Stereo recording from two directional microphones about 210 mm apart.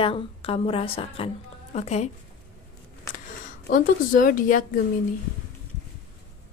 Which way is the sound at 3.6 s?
40° left (ahead or behind).